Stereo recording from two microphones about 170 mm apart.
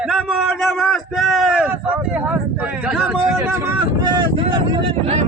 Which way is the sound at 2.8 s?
5° right (ahead or behind).